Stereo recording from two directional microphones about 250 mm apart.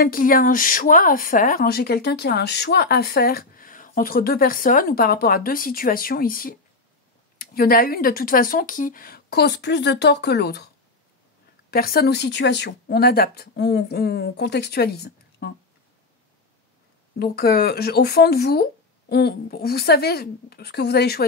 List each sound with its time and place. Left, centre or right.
0.0 s speech: left
11.7 s speech: left
17.2 s speech: left